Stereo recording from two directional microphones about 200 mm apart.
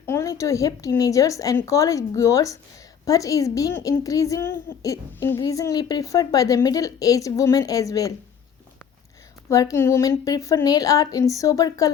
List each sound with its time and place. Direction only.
0.0 s a woman's voice: 15° left (ahead or behind)
9.5 s a woman's voice: 15° left (ahead or behind)